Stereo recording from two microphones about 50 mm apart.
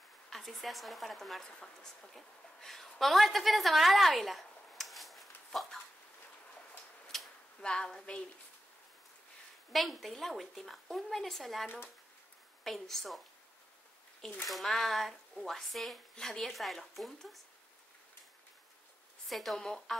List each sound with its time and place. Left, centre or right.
0.3 s a woman's voice: centre
7.1 s a sound: centre
7.6 s a woman's voice: centre
9.7 s speech: centre
14.4 s speech: centre
19.2 s speech: centre
19.6 s a woman's voice: centre